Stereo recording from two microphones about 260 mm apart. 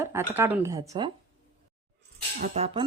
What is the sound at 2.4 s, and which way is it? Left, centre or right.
Music, right.